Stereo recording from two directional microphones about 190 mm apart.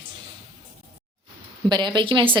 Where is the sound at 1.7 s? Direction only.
25° right (ahead or behind).